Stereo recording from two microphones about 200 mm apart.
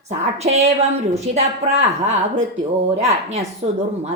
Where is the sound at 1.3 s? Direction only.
35° right (ahead or behind).